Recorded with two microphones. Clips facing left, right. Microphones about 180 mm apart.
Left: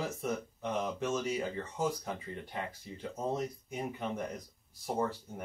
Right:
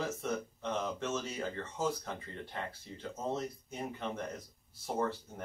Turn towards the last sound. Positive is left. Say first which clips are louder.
# left 1 dB
turn(degrees=10)  # may be behind; listen again after turning